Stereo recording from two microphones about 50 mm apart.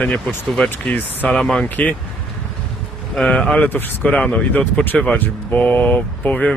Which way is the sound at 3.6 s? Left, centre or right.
Left.